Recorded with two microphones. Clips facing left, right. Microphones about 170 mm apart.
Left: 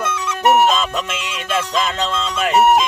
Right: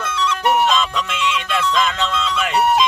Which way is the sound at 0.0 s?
50° left (ahead or behind).